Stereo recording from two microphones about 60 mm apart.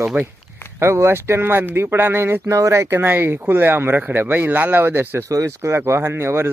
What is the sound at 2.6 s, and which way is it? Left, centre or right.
Speech, right.